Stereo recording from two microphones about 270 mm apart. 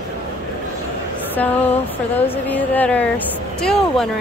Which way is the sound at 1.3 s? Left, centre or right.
Centre.